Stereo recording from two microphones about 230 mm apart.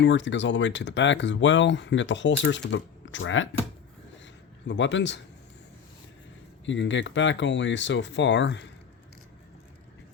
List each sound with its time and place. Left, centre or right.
0.0 s speech: left
4.6 s speech: left
6.7 s speech: left